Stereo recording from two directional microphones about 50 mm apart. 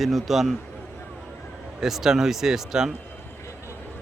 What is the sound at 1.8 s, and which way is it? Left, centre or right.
Speech, centre.